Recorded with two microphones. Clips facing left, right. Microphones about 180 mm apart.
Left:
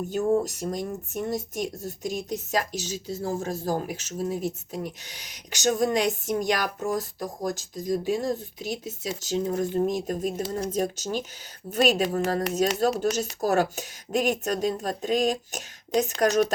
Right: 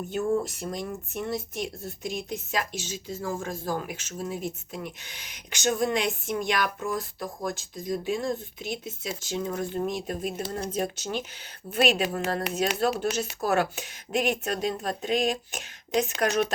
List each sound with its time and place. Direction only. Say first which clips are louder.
0.3 s speech: left 3 dB; 40° left (ahead or behind)